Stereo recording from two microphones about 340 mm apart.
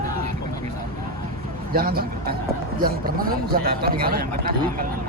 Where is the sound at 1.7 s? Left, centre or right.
Right.